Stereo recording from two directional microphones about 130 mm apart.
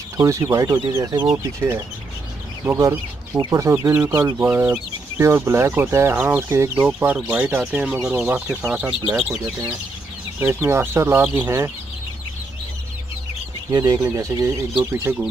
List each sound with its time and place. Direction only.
0.2 s speech: 25° right (ahead or behind)
13.7 s speech: 30° right (ahead or behind)